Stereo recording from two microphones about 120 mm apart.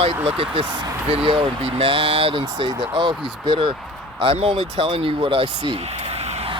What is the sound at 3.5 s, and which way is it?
Speech, 40° right (ahead or behind).